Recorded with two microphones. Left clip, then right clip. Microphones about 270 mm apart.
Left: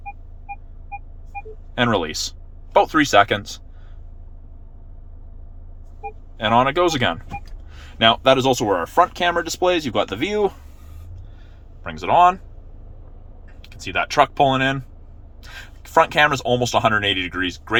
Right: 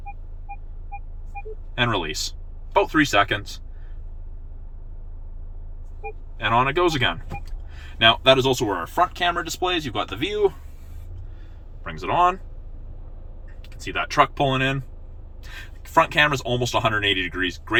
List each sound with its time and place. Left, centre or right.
1.7 s speech: centre
6.3 s speech: left
11.8 s speech: left
13.6 s speech: left